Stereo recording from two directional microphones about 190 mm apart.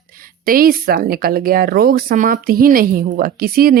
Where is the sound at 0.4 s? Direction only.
50° right (ahead or behind).